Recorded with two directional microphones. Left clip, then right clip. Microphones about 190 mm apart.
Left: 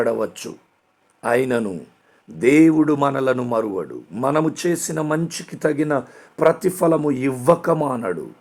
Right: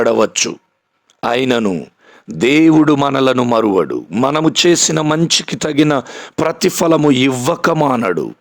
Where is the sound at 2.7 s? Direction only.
30° right (ahead or behind).